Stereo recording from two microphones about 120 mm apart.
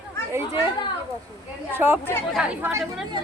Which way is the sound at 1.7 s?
20° right (ahead or behind).